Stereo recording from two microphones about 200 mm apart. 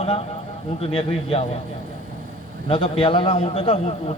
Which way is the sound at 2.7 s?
30° left (ahead or behind).